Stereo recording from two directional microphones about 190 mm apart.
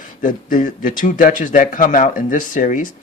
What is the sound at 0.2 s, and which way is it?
A man's voice, 45° left (ahead or behind).